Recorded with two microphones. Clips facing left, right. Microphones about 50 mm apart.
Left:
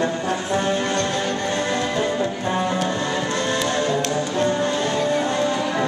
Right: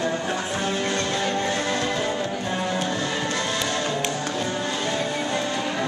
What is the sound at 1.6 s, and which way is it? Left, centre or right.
Music, left.